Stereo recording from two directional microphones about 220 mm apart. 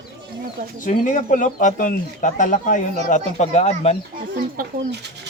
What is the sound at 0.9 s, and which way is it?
Speech, 35° left (ahead or behind).